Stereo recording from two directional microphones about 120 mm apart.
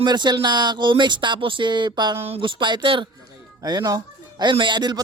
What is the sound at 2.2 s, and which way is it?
Speech, 50° right (ahead or behind).